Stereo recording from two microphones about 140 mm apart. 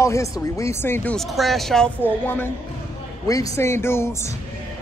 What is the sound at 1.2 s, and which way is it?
Speech, centre (ahead or behind).